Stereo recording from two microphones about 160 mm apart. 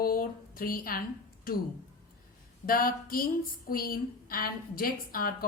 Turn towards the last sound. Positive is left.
turn(degrees=65)  # may be behind; listen again after turning